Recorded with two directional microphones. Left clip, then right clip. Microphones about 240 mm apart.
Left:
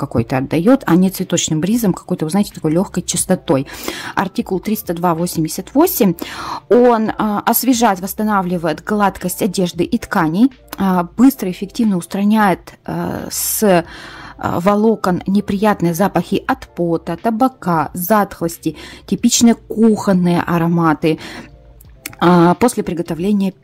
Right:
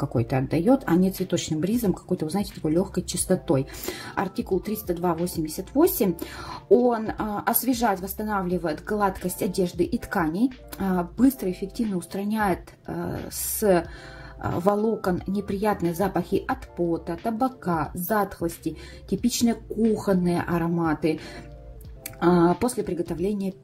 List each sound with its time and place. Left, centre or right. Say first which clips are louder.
0.0 s speech: left 8 dB; left
22.2 s speech: left 9 dB; left